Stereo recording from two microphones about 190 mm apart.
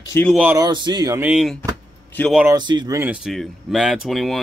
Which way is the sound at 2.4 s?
20° right (ahead or behind).